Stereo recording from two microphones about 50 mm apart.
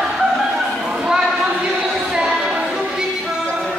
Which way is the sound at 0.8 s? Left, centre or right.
Centre.